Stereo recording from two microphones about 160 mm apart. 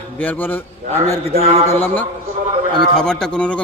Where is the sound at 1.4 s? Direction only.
40° right (ahead or behind).